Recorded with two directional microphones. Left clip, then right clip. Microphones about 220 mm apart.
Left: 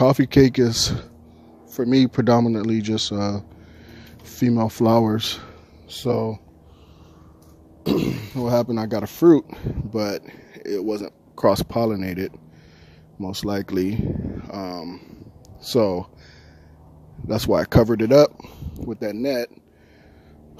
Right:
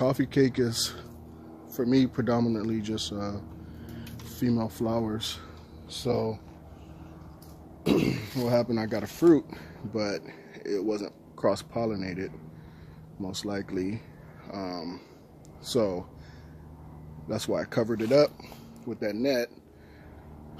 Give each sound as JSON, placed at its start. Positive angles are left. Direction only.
{"t": 0.0, "sound": "speech", "side_deg": 40}
{"t": 7.8, "sound": "a man's voice", "side_deg": 50}
{"t": 17.3, "sound": "speech", "side_deg": 40}